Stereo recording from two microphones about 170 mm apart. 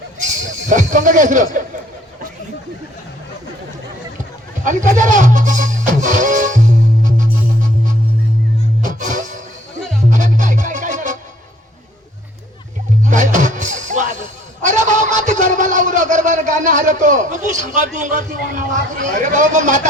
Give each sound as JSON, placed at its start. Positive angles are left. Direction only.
{"t": 0.7, "sound": "a man's voice", "side_deg": -50}
{"t": 4.6, "sound": "speech", "side_deg": -45}
{"t": 8.8, "sound": "music", "side_deg": -50}
{"t": 13.1, "sound": "music", "side_deg": -45}
{"t": 14.6, "sound": "a man's voice", "side_deg": -45}